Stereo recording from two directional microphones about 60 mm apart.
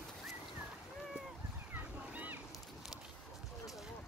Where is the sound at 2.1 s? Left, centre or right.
Right.